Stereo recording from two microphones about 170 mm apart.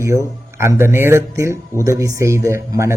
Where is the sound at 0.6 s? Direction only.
15° right (ahead or behind).